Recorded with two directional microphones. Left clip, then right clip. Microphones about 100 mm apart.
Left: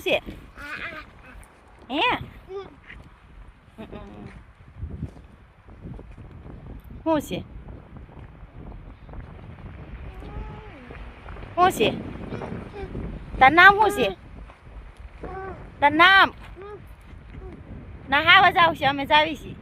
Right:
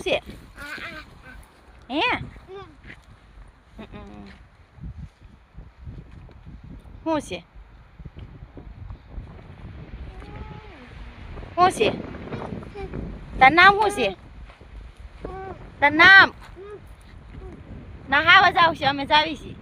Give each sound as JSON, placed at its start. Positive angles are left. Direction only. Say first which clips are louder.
{"t": 0.0, "sound": "speech", "louder": "left 1 dB", "side_deg": 30}
{"t": 0.6, "sound": "goose", "louder": "left 1 dB", "side_deg": 0}
{"t": 1.9, "sound": "a woman's voice", "louder": "even", "side_deg": 20}
{"t": 3.8, "sound": "a sound", "louder": "left 1 dB", "side_deg": 20}
{"t": 7.0, "sound": "speech", "louder": "left 2 dB", "side_deg": 25}
{"t": 11.5, "sound": "a woman's voice", "louder": "right 1 dB", "side_deg": 30}
{"t": 13.4, "sound": "a woman's voice", "louder": "even", "side_deg": 25}
{"t": 15.8, "sound": "speech", "louder": "right 3 dB", "side_deg": 15}
{"t": 17.5, "sound": "a sound", "louder": "even", "side_deg": 0}
{"t": 18.1, "sound": "a woman's voice", "louder": "right 1 dB", "side_deg": 10}